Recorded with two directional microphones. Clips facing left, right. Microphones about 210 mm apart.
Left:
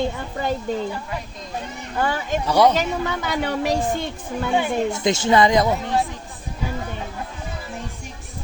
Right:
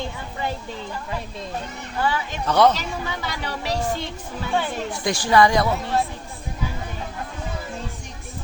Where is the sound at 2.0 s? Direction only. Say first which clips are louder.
Left 2 dB; 50° left (ahead or behind).